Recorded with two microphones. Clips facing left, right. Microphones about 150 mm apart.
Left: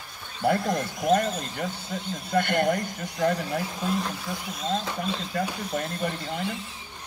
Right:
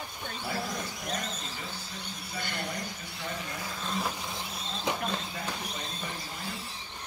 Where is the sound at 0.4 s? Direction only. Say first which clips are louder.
Left 11 dB; 55° left (ahead or behind).